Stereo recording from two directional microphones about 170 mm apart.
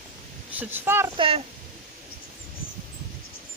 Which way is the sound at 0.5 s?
10° right (ahead or behind).